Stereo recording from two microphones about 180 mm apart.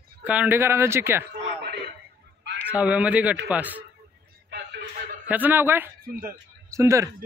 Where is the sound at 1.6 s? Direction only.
65° right (ahead or behind).